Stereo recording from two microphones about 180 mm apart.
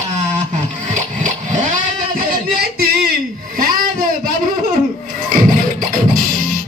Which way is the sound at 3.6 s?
50° right (ahead or behind).